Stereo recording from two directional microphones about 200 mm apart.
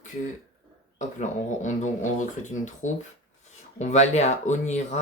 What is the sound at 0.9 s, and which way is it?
Speech, 35° left (ahead or behind).